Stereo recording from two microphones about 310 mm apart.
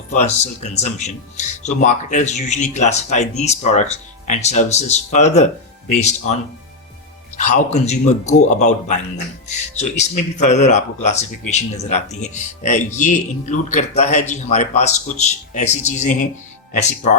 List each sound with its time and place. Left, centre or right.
0.1 s a man's voice: left
7.3 s a man's voice: left